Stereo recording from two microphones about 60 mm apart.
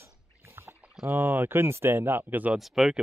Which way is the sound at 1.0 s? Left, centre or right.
Right.